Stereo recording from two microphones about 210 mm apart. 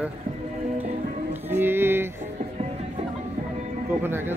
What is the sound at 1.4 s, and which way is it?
Speech, 10° right (ahead or behind).